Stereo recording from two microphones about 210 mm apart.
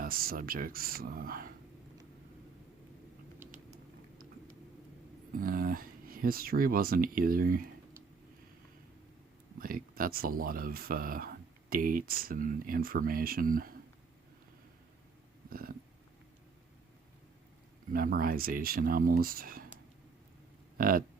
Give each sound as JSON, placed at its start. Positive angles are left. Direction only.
{"t": 0.0, "sound": "speech", "side_deg": -45}
{"t": 5.4, "sound": "speech", "side_deg": -45}
{"t": 9.6, "sound": "speech", "side_deg": -45}
{"t": 15.4, "sound": "a sound", "side_deg": -45}
{"t": 17.9, "sound": "speech", "side_deg": -45}
{"t": 20.7, "sound": "speech", "side_deg": -40}